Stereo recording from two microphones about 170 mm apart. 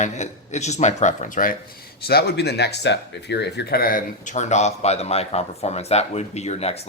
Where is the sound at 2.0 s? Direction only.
70° left (ahead or behind); by 6.8 s 40° left (ahead or behind).